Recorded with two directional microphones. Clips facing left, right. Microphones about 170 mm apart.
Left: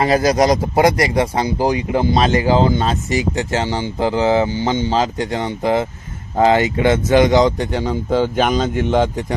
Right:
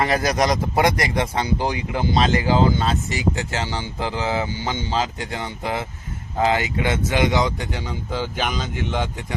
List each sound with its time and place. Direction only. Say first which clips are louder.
0.0 s speech: left 6 dB; 20° left (ahead or behind); by 9.2 s 45° left (ahead or behind)